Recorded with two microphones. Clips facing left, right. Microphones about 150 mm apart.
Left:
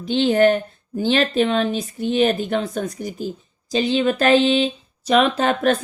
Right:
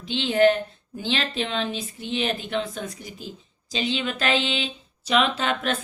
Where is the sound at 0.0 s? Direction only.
45° left (ahead or behind).